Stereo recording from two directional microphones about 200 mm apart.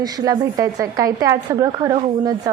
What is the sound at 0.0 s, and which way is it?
A woman's voice, 20° right (ahead or behind).